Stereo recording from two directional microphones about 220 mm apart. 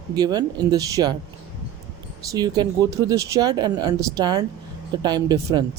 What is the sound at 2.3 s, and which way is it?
Speech, 15° right (ahead or behind).